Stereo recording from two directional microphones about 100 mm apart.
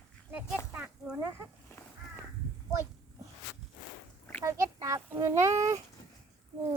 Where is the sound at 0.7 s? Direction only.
15° right (ahead or behind).